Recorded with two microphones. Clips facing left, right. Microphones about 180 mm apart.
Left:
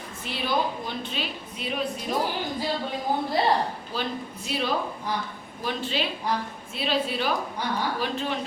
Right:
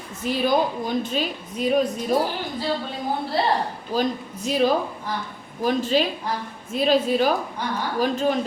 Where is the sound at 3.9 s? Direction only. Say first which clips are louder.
Right 7 dB; 40° right (ahead or behind).